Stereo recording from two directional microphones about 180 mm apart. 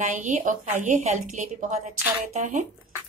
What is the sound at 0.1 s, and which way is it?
A woman's voice, 45° right (ahead or behind).